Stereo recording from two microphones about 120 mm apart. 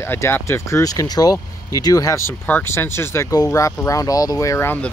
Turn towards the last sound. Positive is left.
turn(degrees=15)  # may be behind; listen again after turning